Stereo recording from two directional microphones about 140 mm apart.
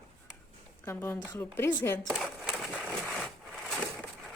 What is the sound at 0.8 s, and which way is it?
A woman's voice, 15° left (ahead or behind).